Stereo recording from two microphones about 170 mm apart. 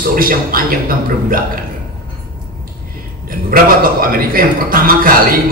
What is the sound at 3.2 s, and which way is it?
A man's voice, 55° right (ahead or behind).